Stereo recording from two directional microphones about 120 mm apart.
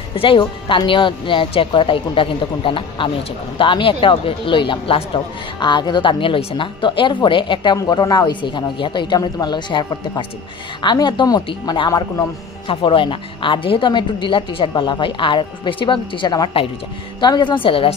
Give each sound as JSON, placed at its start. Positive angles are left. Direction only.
{"t": 0.1, "sound": "a woman's voice", "side_deg": 45}